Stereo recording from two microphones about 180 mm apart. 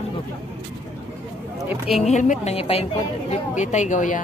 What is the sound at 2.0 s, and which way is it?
Speech, 40° left (ahead or behind).